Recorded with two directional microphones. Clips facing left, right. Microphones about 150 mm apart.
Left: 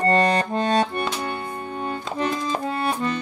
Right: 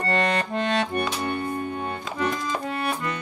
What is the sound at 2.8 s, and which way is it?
Accordion, 30° left (ahead or behind).